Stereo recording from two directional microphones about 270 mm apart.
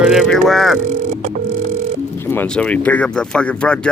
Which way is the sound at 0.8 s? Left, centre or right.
Right.